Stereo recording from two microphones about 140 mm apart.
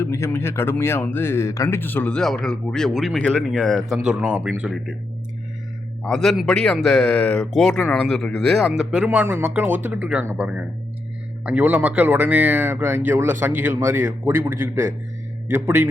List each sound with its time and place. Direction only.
0.0 s speech: 20° left (ahead or behind); by 4.9 s 5° right (ahead or behind)
6.0 s speech: centre (ahead or behind)
9.0 s speech: 15° right (ahead or behind)